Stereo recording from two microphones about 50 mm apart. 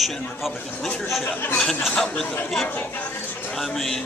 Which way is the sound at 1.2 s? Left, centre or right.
Left.